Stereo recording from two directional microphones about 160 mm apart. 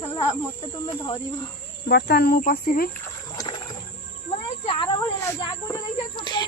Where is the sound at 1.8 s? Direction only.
90° left.